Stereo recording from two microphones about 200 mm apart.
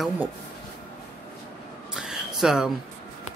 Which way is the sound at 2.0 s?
5° right (ahead or behind).